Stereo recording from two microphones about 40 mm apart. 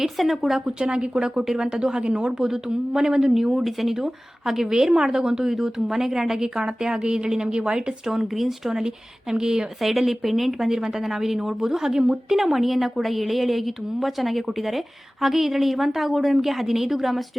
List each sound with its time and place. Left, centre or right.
0.0 s speech: centre
0.6 s a woman's voice: right
8.0 s a woman's voice: centre
9.9 s speech: centre